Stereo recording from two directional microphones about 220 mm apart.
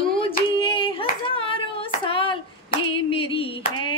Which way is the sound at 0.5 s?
20° left (ahead or behind).